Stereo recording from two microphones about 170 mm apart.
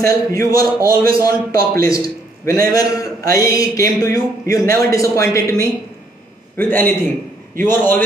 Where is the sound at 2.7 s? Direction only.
20° left (ahead or behind).